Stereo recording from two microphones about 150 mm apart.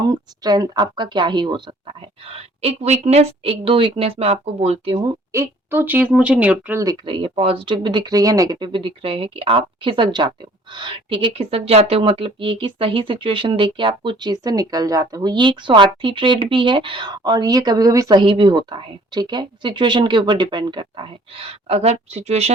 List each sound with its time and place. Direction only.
0.0 s speech: 25° right (ahead or behind); by 4.9 s 45° right (ahead or behind)
4.9 s speech: 20° right (ahead or behind)
6.8 s speech: 35° right (ahead or behind)